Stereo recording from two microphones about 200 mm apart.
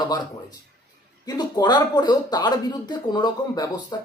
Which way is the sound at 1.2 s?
20° left (ahead or behind).